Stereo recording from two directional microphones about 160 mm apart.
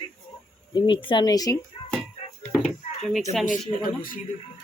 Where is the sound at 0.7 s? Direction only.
30° left (ahead or behind).